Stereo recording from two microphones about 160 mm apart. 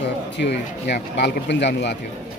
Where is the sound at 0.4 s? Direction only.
90° left.